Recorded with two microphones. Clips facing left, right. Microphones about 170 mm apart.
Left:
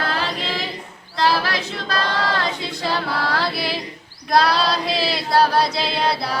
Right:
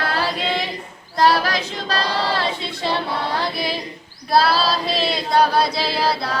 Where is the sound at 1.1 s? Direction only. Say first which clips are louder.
Right 3 dB; 45° right (ahead or behind); by 3.8 s 20° right (ahead or behind).